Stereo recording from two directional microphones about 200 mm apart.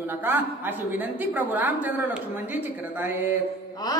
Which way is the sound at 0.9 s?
10° right (ahead or behind).